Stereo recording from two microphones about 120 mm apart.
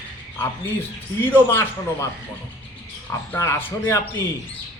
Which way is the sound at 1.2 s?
15° left (ahead or behind).